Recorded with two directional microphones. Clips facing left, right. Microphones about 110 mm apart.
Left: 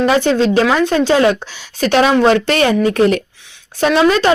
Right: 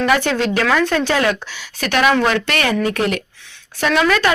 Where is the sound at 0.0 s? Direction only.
25° left (ahead or behind).